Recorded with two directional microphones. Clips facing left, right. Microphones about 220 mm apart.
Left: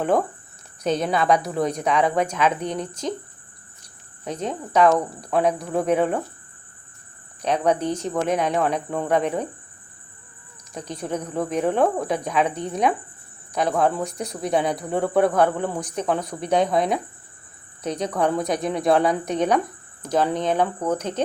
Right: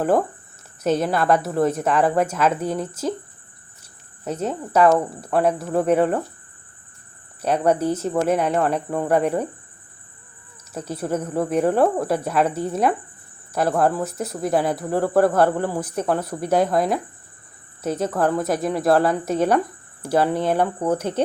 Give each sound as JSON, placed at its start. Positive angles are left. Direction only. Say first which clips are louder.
{"t": 0.8, "sound": "speech", "louder": "right 2 dB", "side_deg": -5}
{"t": 4.3, "sound": "speech", "louder": "right 2 dB", "side_deg": -5}
{"t": 7.4, "sound": "a woman's voice", "louder": "right 2 dB", "side_deg": -5}
{"t": 10.8, "sound": "a woman's voice", "louder": "right 3 dB", "side_deg": -5}